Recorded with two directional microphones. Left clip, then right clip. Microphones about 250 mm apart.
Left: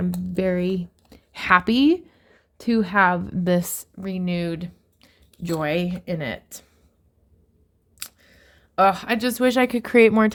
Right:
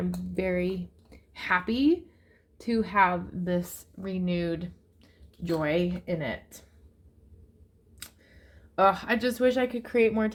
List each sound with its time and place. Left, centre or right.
0.3 s speech: left
7.9 s speech: left